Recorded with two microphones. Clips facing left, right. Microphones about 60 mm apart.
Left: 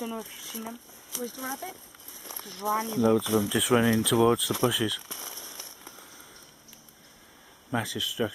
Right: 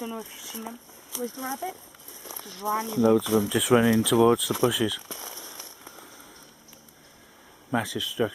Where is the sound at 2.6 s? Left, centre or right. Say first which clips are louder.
Even; right.